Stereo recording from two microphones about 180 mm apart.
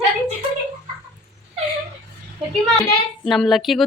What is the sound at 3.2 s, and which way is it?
Speech, centre (ahead or behind).